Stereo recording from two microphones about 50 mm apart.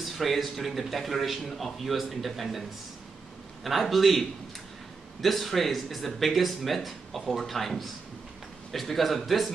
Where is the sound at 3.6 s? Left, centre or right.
Centre.